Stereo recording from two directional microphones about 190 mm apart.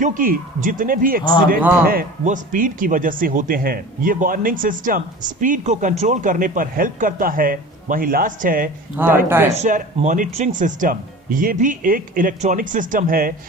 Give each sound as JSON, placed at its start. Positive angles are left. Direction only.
{"t": 0.0, "sound": "speech", "side_deg": -45}
{"t": 9.3, "sound": "speech", "side_deg": -10}
{"t": 9.6, "sound": "speech", "side_deg": -40}